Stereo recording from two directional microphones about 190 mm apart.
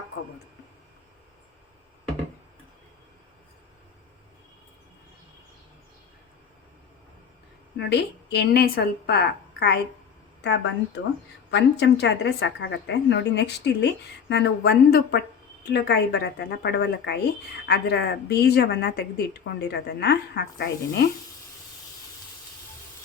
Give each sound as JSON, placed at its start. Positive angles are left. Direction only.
{"t": 7.8, "sound": "a woman's voice", "side_deg": 60}